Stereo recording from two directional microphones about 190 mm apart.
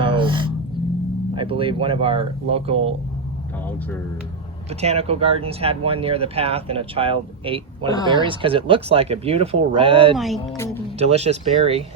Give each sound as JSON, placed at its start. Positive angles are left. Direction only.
{"t": 0.0, "sound": "music", "side_deg": -25}
{"t": 1.4, "sound": "speech", "side_deg": -25}
{"t": 4.7, "sound": "speech", "side_deg": -35}
{"t": 10.2, "sound": "speech", "side_deg": 0}
{"t": 10.9, "sound": "speech", "side_deg": -35}